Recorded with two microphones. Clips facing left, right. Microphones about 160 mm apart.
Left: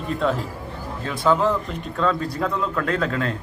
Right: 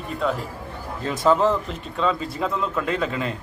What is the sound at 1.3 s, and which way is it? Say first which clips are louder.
Speech: even; centre (ahead or behind).